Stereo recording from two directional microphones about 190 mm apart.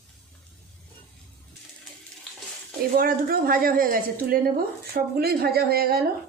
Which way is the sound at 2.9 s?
50° right (ahead or behind).